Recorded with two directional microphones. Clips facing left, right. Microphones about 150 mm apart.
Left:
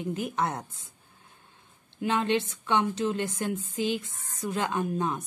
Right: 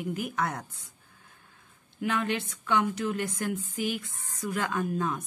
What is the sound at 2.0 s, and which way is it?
Speech, 25° left (ahead or behind).